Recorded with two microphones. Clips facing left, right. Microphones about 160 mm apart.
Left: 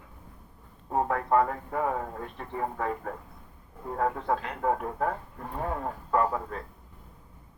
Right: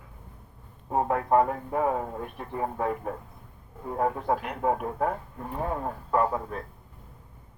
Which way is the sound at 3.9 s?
20° right (ahead or behind).